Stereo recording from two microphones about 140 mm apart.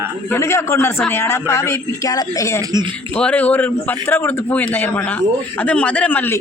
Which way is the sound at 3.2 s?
10° left (ahead or behind).